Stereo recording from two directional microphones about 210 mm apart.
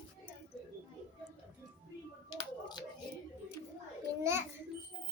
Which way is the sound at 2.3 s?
20° left (ahead or behind).